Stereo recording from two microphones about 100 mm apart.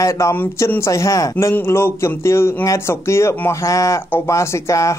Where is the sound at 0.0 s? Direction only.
30° left (ahead or behind).